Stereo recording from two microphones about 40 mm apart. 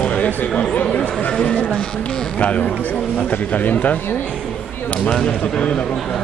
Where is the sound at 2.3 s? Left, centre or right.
Left.